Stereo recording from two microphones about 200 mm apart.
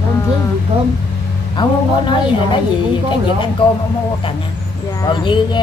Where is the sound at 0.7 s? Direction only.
30° right (ahead or behind).